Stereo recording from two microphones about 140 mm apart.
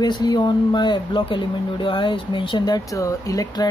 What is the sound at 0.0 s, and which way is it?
Speech, 30° left (ahead or behind).